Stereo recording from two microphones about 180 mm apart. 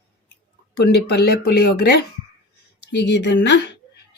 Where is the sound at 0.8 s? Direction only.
65° left (ahead or behind).